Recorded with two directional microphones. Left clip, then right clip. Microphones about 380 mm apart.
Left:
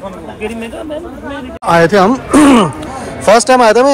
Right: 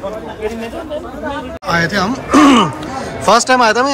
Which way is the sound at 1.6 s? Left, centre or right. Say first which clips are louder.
Left 8 dB; centre.